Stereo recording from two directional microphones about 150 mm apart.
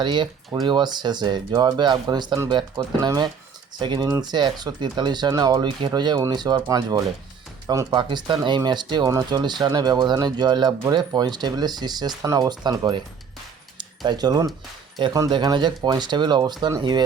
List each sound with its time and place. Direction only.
0.0 s speech: 30° right (ahead or behind)